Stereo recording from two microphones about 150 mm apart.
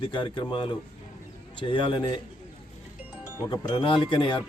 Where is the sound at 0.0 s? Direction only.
35° left (ahead or behind).